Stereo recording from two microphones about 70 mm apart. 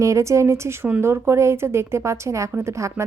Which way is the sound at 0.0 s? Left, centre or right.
Right.